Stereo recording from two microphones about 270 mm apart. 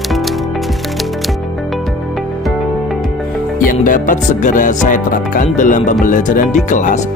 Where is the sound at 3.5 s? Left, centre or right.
Left.